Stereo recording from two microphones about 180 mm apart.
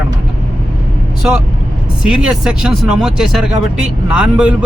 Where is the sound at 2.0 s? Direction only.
5° right (ahead or behind).